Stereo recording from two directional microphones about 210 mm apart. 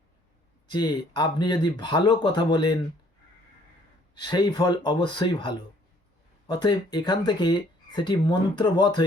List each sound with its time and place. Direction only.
0.7 s speech: 20° left (ahead or behind)
4.1 s speech: 20° left (ahead or behind)